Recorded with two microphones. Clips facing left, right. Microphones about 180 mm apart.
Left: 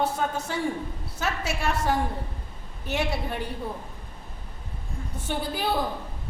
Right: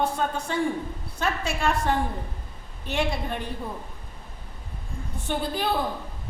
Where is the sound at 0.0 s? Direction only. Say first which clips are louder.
Even; 5° left (ahead or behind).